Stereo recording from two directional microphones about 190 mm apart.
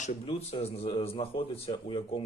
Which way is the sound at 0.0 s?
35° left (ahead or behind).